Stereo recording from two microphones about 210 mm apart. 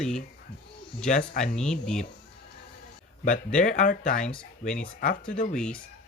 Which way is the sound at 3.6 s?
35° left (ahead or behind).